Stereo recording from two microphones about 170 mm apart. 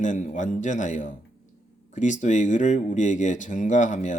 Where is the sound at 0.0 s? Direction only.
45° left (ahead or behind).